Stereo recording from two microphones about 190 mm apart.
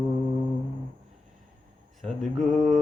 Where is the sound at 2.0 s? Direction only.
Centre (ahead or behind).